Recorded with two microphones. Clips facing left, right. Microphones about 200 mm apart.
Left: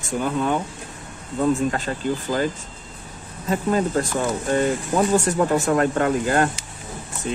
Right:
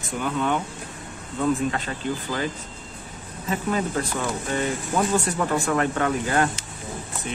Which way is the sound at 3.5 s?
40° left (ahead or behind).